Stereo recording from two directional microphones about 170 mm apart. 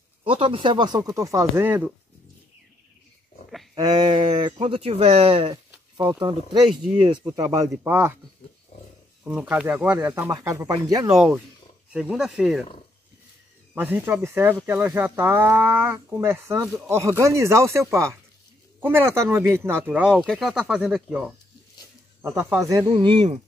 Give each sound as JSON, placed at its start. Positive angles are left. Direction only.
{"t": 0.2, "sound": "speech", "side_deg": -30}
{"t": 3.7, "sound": "speech", "side_deg": -25}
{"t": 9.2, "sound": "speech", "side_deg": -5}
{"t": 11.9, "sound": "speech", "side_deg": -5}
{"t": 13.7, "sound": "speech", "side_deg": -10}
{"t": 22.2, "sound": "speech", "side_deg": -15}